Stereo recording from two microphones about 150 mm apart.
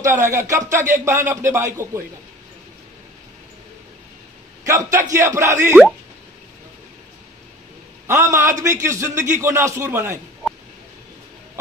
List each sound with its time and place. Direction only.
0.0 s speech: 20° right (ahead or behind)
4.6 s speech: 20° right (ahead or behind)
8.1 s speech: 20° right (ahead or behind)